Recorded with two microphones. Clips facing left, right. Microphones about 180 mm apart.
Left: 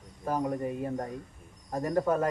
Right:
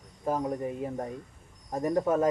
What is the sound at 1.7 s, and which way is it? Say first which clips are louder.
Speech: right 1 dB; 20° right (ahead or behind).